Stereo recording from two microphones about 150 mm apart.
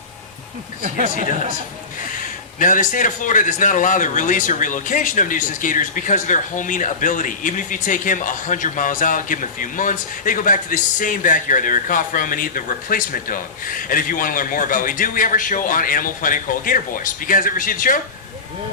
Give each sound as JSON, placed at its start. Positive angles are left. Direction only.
{"t": 2.6, "sound": "a man's voice", "side_deg": 60}